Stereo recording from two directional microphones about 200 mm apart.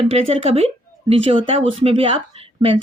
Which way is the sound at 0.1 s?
30° right (ahead or behind).